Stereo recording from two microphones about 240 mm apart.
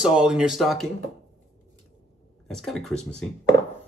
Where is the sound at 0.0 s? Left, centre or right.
Centre.